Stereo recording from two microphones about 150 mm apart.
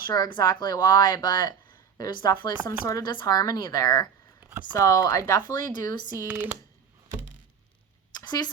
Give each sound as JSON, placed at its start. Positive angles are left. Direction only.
{"t": 0.1, "sound": "speech", "side_deg": 25}
{"t": 4.4, "sound": "a sound", "side_deg": -10}
{"t": 4.8, "sound": "speech", "side_deg": 25}
{"t": 5.5, "sound": "speech", "side_deg": -60}
{"t": 6.2, "sound": "speech", "side_deg": -10}
{"t": 8.2, "sound": "a sound", "side_deg": 25}